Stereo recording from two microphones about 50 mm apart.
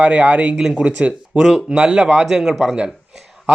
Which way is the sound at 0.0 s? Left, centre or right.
Right.